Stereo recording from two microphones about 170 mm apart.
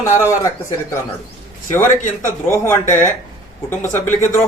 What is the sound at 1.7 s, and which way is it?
Speech, 50° left (ahead or behind).